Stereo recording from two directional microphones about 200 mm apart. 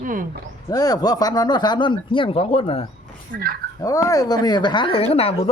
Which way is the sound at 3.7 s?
15° left (ahead or behind).